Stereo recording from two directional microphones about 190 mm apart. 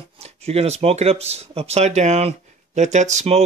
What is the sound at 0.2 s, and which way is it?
Speech, 35° right (ahead or behind).